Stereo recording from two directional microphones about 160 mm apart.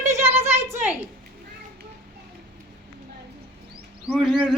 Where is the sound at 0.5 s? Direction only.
15° right (ahead or behind).